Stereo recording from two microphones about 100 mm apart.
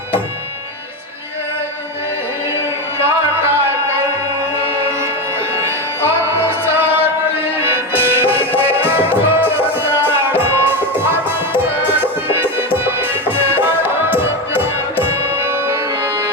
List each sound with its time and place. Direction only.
6.2 s music: 25° right (ahead or behind)